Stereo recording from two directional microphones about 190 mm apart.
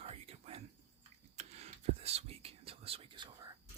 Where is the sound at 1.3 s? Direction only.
35° right (ahead or behind).